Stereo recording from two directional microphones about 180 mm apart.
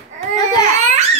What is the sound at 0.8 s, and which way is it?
Babbling, 40° right (ahead or behind).